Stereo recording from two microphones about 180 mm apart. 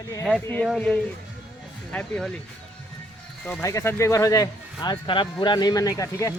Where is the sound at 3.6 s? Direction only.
15° left (ahead or behind).